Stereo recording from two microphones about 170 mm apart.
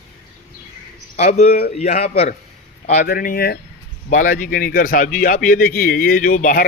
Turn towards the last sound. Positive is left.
turn(degrees=55)  # may be behind; listen again after turning